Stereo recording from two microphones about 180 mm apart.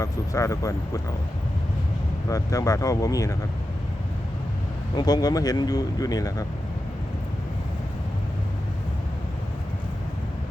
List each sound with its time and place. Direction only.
0.0 s speech: 15° left (ahead or behind)
2.3 s speech: 20° left (ahead or behind)
4.9 s speech: 20° left (ahead or behind)